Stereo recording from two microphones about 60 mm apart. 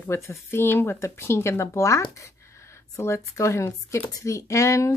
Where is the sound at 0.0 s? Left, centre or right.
Left.